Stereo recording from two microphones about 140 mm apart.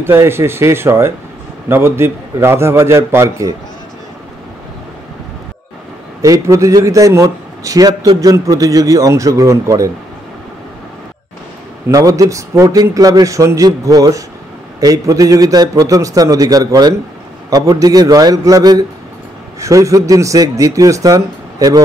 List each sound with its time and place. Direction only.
0.0 s a man's voice: 15° right (ahead or behind)
6.2 s a man's voice: 25° right (ahead or behind)
11.9 s a man's voice: 25° right (ahead or behind)